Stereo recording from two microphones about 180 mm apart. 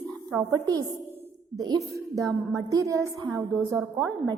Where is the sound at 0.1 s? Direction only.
5° right (ahead or behind).